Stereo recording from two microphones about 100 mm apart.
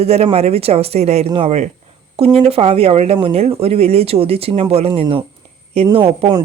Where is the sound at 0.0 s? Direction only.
90° right.